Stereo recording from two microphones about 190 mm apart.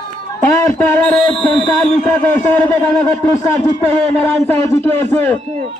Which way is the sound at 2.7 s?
10° left (ahead or behind).